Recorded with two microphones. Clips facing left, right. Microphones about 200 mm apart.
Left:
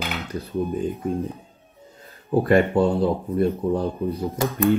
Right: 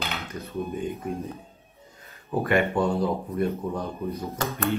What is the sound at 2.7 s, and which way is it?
Speech, 30° left (ahead or behind).